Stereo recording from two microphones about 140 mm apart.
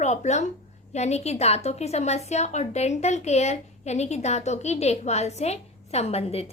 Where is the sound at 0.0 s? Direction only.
55° left (ahead or behind).